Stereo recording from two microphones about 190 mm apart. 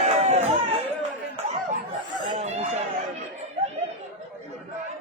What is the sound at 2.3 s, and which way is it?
Chatter, 35° right (ahead or behind).